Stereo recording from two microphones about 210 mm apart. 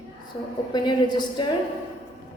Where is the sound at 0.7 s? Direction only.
20° left (ahead or behind).